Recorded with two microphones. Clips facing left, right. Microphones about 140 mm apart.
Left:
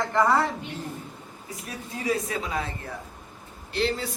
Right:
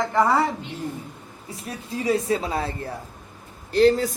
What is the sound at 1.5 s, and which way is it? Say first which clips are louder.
Speech: right 5 dB; 30° right (ahead or behind).